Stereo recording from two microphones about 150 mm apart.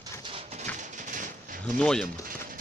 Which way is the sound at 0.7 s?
60° right (ahead or behind).